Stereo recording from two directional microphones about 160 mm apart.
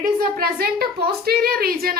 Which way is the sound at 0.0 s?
65° right (ahead or behind).